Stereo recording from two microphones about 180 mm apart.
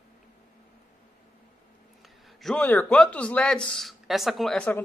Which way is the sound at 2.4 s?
10° left (ahead or behind).